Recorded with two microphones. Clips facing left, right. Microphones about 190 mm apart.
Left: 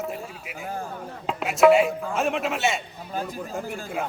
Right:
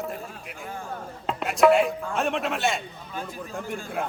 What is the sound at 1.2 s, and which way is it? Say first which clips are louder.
A man's voice: left 2 dB; centre (ahead or behind).